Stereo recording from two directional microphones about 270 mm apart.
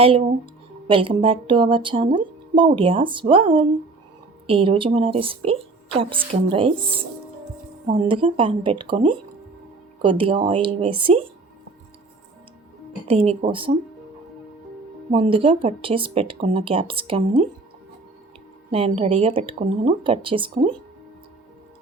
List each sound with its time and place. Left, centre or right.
0.0 s speech: right
13.1 s speech: right
15.1 s speech: centre
18.7 s speech: right